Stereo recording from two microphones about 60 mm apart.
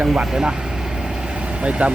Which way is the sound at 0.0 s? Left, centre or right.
Centre.